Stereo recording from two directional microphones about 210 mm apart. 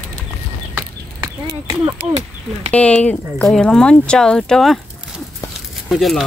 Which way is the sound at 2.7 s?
5° left (ahead or behind).